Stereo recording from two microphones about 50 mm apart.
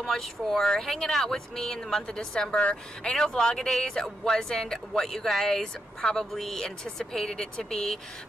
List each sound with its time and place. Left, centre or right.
0.0 s speech: centre